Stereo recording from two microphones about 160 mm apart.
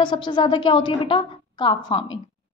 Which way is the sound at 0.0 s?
30° left (ahead or behind).